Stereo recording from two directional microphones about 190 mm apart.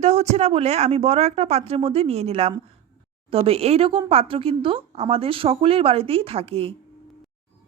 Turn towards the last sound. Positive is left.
turn(degrees=-30)  # may be behind; listen again after turning